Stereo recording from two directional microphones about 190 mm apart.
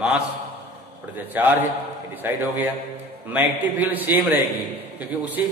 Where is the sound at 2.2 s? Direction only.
10° right (ahead or behind).